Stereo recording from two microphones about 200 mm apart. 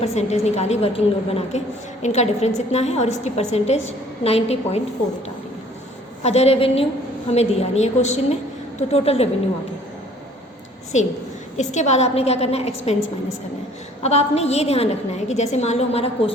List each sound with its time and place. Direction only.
0.0 s a woman's voice: 30° left (ahead or behind)
6.2 s a woman's voice: 30° left (ahead or behind)
11.5 s a woman's voice: 35° left (ahead or behind)
14.0 s a woman's voice: 35° left (ahead or behind)